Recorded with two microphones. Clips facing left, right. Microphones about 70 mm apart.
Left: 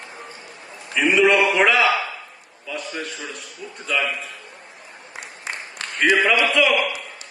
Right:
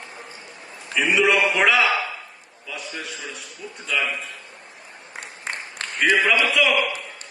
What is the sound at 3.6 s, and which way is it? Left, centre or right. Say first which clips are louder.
Speech: left 1 dB; centre.